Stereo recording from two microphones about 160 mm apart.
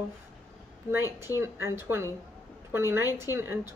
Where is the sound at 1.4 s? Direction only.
15° right (ahead or behind).